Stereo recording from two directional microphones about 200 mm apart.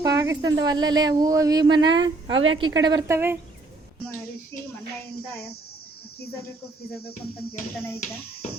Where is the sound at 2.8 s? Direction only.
20° right (ahead or behind).